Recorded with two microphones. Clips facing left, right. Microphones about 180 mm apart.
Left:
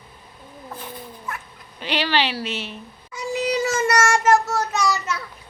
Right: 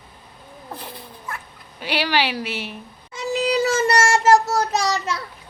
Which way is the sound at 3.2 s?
30° right (ahead or behind).